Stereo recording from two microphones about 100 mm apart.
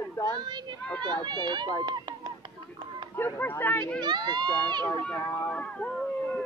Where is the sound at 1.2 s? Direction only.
50° right (ahead or behind).